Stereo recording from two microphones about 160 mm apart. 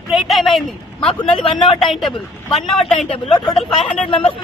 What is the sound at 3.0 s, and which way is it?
Speech, 35° left (ahead or behind).